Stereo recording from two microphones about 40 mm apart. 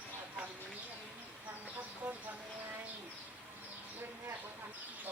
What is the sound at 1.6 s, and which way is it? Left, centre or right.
Vehicle, right.